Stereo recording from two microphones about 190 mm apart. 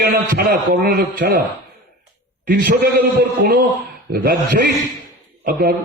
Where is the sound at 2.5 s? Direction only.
55° right (ahead or behind).